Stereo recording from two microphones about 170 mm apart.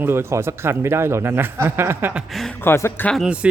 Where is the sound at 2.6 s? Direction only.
15° left (ahead or behind).